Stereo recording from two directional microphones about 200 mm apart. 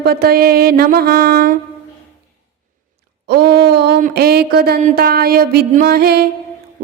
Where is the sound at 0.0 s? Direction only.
50° right (ahead or behind).